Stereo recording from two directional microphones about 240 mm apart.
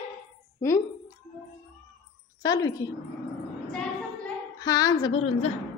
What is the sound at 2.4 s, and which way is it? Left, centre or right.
Speech, centre.